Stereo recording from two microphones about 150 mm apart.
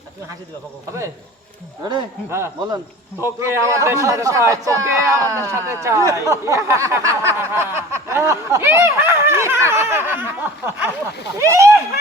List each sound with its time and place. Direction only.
1.8 s a man's voice: 30° right (ahead or behind)
2.3 s a man's voice: 15° right (ahead or behind)